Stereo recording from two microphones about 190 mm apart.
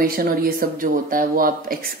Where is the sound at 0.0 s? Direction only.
50° right (ahead or behind).